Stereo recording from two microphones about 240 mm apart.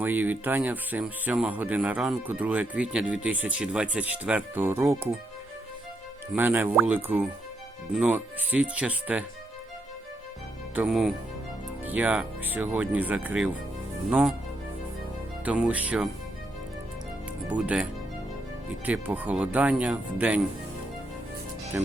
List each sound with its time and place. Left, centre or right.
0.0 s speech: centre
6.3 s speech: centre
10.8 s speech: centre
15.4 s speech: centre
17.5 s speech: centre
18.9 s speech: centre